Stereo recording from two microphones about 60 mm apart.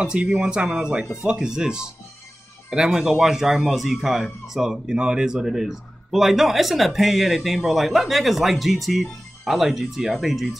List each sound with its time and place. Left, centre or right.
0.0 s speech: centre